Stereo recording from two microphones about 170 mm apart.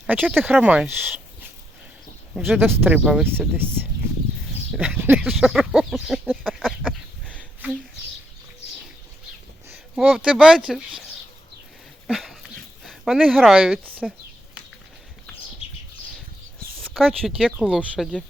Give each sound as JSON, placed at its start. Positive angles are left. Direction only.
{"t": 0.1, "sound": "speech", "side_deg": -10}
{"t": 2.3, "sound": "speech", "side_deg": -10}
{"t": 4.7, "sound": "a sound", "side_deg": -10}
{"t": 9.9, "sound": "speech", "side_deg": -5}
{"t": 12.0, "sound": "dog", "side_deg": 0}
{"t": 12.8, "sound": "speech", "side_deg": 0}
{"t": 15.6, "sound": "a sound", "side_deg": 35}
{"t": 16.8, "sound": "speech", "side_deg": 0}